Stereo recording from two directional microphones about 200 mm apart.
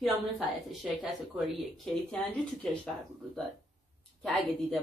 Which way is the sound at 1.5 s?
Centre (ahead or behind).